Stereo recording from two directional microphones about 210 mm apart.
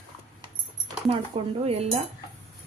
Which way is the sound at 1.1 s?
30° right (ahead or behind).